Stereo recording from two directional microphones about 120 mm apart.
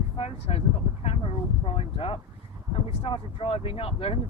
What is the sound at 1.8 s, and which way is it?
Speech, 50° left (ahead or behind).